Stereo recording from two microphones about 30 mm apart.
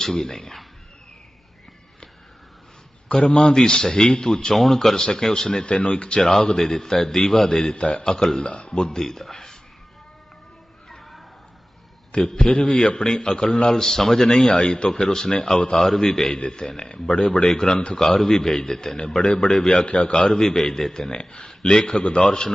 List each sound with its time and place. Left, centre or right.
0.0 s a man's voice: centre
3.1 s a man's voice: left
4.5 s a man's voice: centre
4.9 s a man's voice: left
5.6 s speech: left
6.4 s a man's voice: centre
7.8 s a man's voice: left
8.4 s speech: left
9.0 s a man's voice: centre
12.4 s a man's voice: left
20.1 s a man's voice: left
21.1 s a man's voice: left